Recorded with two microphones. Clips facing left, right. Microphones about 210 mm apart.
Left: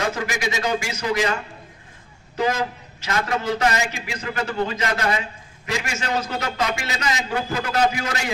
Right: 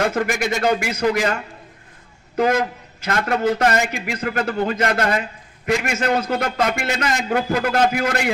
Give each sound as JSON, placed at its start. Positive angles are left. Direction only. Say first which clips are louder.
{"t": 0.0, "sound": "a man's voice", "louder": "right 5 dB", "side_deg": -50}
{"t": 2.3, "sound": "a man's voice", "louder": "right 4 dB", "side_deg": -55}